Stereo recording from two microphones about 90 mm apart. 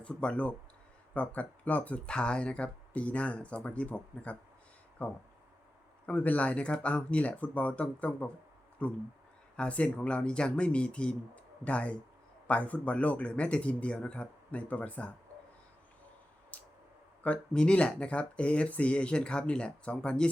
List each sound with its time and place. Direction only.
0.0 s speech: 10° left (ahead or behind)
6.1 s speech: 15° left (ahead or behind)
16.5 s tick: 15° left (ahead or behind)
17.2 s speech: 10° left (ahead or behind)